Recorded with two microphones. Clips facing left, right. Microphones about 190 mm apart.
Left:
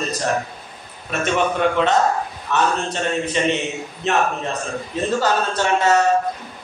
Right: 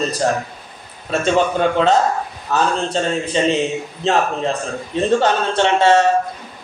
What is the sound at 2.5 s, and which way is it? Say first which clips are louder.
A man's voice: right 2 dB; 30° right (ahead or behind).